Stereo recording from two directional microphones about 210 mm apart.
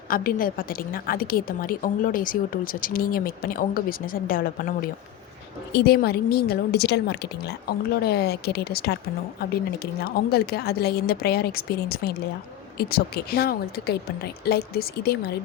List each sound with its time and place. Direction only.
0.1 s a woman's voice: 40° left (ahead or behind)
5.7 s a woman's voice: 50° left (ahead or behind)